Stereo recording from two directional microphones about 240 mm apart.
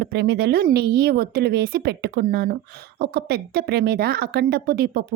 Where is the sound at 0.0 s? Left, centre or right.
Right.